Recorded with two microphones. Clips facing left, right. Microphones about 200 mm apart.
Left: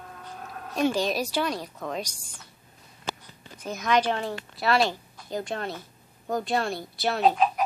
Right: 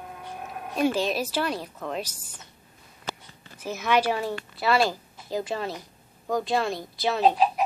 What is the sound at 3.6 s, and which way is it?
A woman's voice, 5° right (ahead or behind).